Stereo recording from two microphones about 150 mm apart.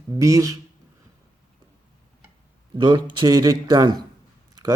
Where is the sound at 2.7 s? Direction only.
30° right (ahead or behind).